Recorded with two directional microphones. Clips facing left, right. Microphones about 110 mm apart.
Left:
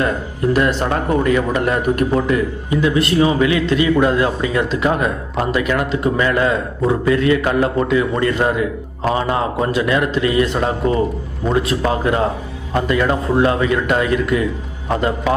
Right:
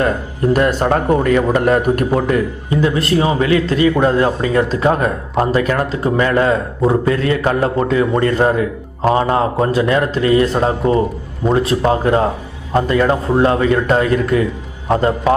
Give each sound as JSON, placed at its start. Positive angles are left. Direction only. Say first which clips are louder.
{"t": 0.5, "sound": "a man's voice", "louder": "right 3 dB", "side_deg": -45}
{"t": 2.8, "sound": "speech", "louder": "even", "side_deg": -35}